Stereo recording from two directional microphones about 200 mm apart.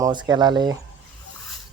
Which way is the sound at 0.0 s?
20° right (ahead or behind).